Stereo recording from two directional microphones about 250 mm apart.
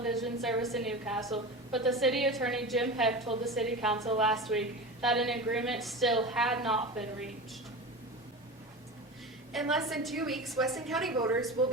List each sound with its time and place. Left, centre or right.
0.0 s a woman's voice: centre
9.5 s a woman's voice: centre
11.1 s a woman's voice: centre